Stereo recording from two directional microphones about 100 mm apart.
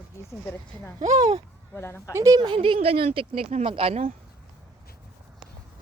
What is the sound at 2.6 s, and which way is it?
Speech, 75° right (ahead or behind).